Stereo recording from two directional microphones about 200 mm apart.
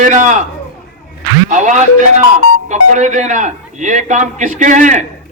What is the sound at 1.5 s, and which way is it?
A man's voice, 40° right (ahead or behind).